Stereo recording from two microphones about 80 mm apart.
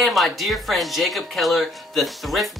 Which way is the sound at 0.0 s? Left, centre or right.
Centre.